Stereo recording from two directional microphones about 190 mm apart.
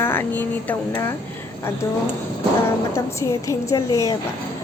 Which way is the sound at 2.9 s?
15° left (ahead or behind).